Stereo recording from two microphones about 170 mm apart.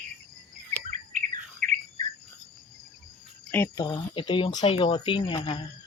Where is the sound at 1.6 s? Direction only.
55° right (ahead or behind).